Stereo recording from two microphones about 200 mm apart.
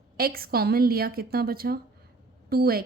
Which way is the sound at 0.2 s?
50° right (ahead or behind).